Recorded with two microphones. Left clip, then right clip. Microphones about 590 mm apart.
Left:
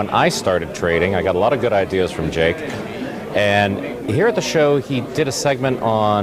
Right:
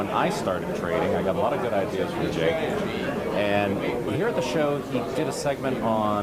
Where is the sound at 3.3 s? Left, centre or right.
Left.